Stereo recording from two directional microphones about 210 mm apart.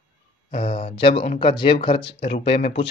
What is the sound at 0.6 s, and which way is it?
Speech, 30° left (ahead or behind).